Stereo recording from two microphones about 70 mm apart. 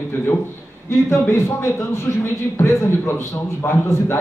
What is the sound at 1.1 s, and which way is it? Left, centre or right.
Speech, left.